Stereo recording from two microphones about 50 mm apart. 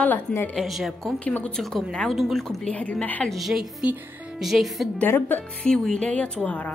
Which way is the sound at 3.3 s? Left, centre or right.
Centre.